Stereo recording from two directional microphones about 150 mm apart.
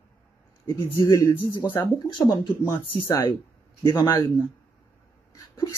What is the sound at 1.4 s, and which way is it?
Speech, 30° left (ahead or behind).